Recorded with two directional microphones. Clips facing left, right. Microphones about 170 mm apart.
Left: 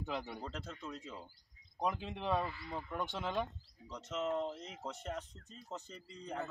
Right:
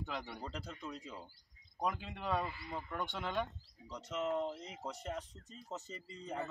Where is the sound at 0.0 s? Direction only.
5° left (ahead or behind).